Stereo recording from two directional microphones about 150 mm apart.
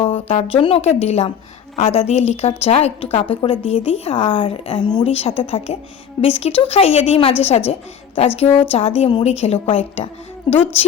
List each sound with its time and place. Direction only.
0.0 s a woman's voice: 40° left (ahead or behind)
4.9 s speech: 30° left (ahead or behind)
5.1 s a woman's voice: 40° left (ahead or behind)